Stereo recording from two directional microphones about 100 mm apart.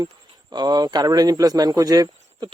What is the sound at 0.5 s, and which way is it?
A man's voice, 45° right (ahead or behind).